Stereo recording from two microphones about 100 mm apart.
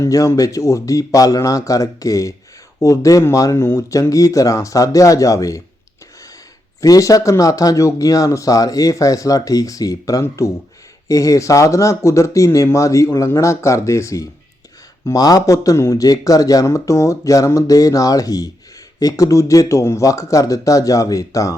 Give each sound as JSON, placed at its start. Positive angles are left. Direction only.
{"t": 0.0, "sound": "speech", "side_deg": 30}
{"t": 6.8, "sound": "speech", "side_deg": 35}